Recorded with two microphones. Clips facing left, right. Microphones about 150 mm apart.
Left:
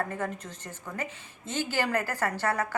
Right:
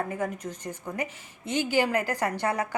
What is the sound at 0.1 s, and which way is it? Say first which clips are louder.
A woman's voice: right 3 dB; 15° right (ahead or behind).